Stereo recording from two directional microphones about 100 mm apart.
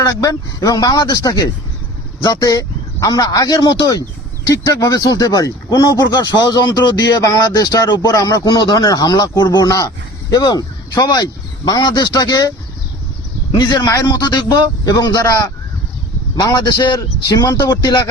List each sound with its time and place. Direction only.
0.0 s a man's voice: 35° left (ahead or behind)